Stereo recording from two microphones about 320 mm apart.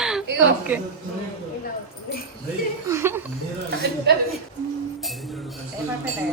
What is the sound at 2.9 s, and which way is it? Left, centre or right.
Speech, centre.